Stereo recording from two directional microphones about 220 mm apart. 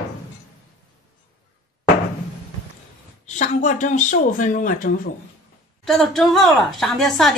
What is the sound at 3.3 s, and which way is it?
Speech, 35° left (ahead or behind).